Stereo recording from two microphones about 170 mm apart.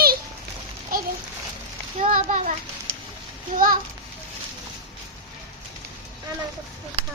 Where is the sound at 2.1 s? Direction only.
45° right (ahead or behind).